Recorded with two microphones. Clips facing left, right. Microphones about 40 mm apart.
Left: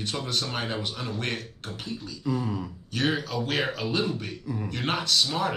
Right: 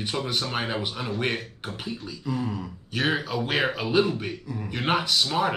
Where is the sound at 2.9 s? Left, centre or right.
Centre.